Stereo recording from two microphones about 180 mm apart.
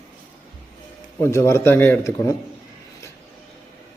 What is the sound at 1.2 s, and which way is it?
A man's voice, 15° left (ahead or behind).